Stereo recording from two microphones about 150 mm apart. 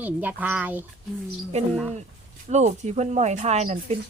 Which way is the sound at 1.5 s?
45° right (ahead or behind).